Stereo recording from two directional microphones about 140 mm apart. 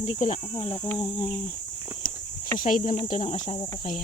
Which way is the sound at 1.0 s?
45° left (ahead or behind).